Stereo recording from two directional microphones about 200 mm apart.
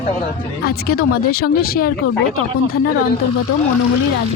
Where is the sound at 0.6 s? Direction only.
50° left (ahead or behind).